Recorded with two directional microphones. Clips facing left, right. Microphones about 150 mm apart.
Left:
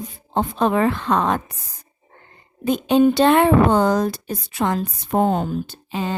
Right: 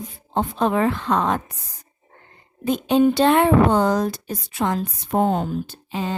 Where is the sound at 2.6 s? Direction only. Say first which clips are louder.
Left 2 dB; 70° left (ahead or behind).